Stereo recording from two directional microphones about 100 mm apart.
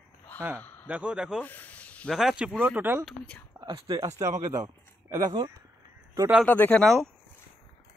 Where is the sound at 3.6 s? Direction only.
45° right (ahead or behind).